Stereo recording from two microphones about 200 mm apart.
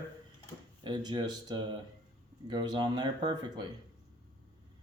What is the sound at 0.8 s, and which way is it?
Speech, 20° right (ahead or behind).